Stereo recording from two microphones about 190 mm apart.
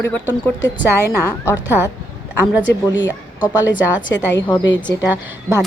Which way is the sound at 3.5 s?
10° right (ahead or behind).